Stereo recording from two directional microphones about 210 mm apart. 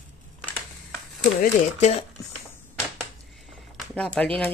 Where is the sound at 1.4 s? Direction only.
30° left (ahead or behind).